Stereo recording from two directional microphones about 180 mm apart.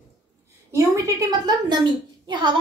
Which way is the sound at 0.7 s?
15° right (ahead or behind).